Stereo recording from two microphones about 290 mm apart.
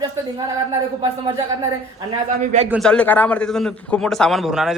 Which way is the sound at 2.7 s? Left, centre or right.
Centre.